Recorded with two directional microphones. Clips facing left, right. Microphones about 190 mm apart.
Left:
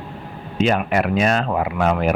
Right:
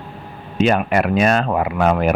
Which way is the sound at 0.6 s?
55° right (ahead or behind).